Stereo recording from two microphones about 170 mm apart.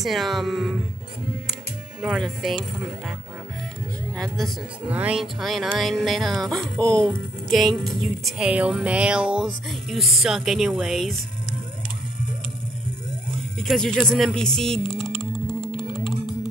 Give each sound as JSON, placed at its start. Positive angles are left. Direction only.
{"t": 0.0, "sound": "speech", "side_deg": 0}
{"t": 4.8, "sound": "speech", "side_deg": -10}
{"t": 13.6, "sound": "speech", "side_deg": 0}
{"t": 15.6, "sound": "music", "side_deg": 35}